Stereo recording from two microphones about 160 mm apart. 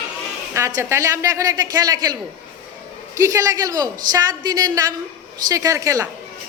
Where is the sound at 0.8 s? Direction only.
20° right (ahead or behind).